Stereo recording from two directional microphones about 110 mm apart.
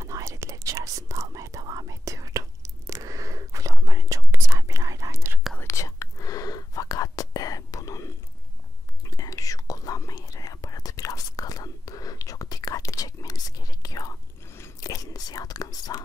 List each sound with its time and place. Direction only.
0.0 s whispering: 25° right (ahead or behind)
5.6 s whispering: 25° left (ahead or behind)